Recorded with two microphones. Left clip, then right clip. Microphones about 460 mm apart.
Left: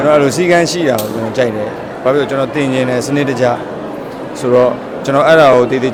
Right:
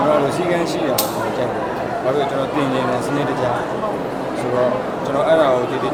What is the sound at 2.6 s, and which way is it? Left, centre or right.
Speech, left.